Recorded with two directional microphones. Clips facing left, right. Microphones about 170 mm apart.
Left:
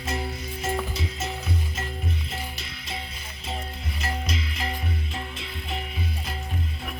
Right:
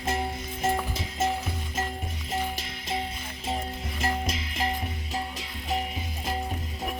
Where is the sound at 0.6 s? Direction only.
50° right (ahead or behind).